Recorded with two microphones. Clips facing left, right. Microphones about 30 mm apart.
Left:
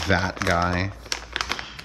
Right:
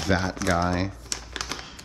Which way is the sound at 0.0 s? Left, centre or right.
Left.